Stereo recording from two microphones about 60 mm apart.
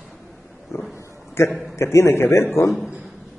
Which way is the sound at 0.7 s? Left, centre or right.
Left.